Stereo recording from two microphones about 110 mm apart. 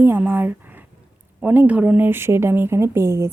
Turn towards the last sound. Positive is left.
turn(degrees=-25)  # may be behind; listen again after turning